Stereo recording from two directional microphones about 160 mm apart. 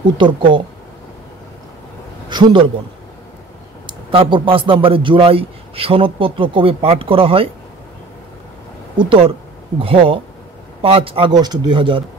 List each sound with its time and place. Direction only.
0.2 s a man's voice: 30° right (ahead or behind)
2.2 s a man's voice: 30° right (ahead or behind)
3.8 s a man's voice: 30° right (ahead or behind)
8.9 s a man's voice: 35° right (ahead or behind)